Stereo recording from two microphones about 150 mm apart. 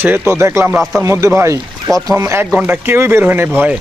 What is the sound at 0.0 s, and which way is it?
Speech, 15° right (ahead or behind).